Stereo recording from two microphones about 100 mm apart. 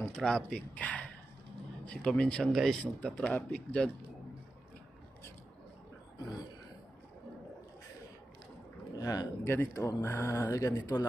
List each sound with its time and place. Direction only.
0.0 s speech: 10° left (ahead or behind)
2.8 s speech: 10° left (ahead or behind)
8.9 s speech: 40° left (ahead or behind)
9.4 s speech: 20° left (ahead or behind)
9.8 s speech: 35° left (ahead or behind)